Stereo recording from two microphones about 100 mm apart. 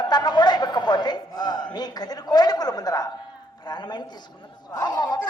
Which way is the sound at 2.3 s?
40° left (ahead or behind).